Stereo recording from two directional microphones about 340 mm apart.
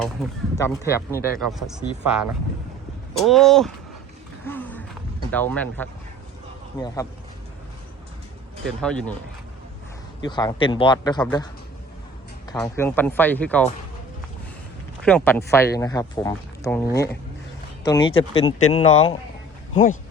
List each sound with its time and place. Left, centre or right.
0.0 s speech: centre
4.4 s a sound: centre
5.3 s speech: centre
8.6 s speech: centre
10.2 s speech: centre
12.5 s speech: centre
15.0 s speech: centre